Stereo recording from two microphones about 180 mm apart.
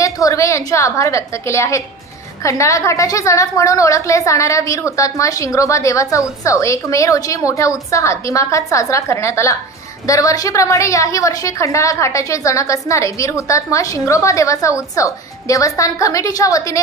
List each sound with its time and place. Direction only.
0.0 s a woman's voice: 15° left (ahead or behind)